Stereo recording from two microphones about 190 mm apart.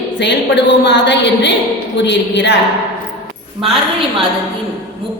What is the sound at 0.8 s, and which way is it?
A woman's voice, 70° left (ahead or behind).